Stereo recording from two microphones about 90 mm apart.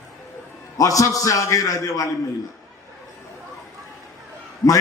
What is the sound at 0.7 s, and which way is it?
A man's voice, 40° left (ahead or behind).